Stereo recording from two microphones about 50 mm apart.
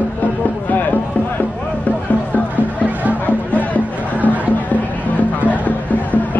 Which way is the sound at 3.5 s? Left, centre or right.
Left.